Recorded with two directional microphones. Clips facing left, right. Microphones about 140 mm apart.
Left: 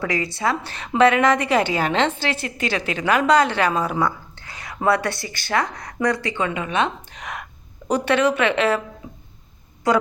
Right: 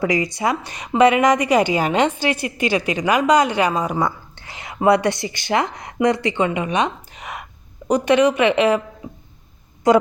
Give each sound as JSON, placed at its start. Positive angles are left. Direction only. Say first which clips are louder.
{"t": 0.0, "sound": "a woman's voice", "louder": "right 3 dB", "side_deg": -20}
{"t": 4.4, "sound": "whispering", "louder": "right 2 dB", "side_deg": -25}
{"t": 4.8, "sound": "a woman's voice", "louder": "right 5 dB", "side_deg": -20}